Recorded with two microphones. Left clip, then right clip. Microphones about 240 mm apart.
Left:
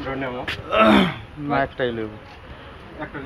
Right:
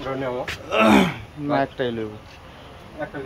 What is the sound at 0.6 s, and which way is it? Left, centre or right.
Speech, centre.